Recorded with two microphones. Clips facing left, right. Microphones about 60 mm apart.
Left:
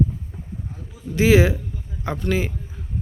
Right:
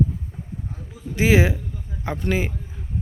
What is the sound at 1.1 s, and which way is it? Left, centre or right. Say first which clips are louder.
Speech: left 2 dB; centre.